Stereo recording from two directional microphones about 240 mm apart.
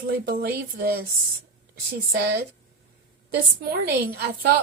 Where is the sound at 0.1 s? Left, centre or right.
Right.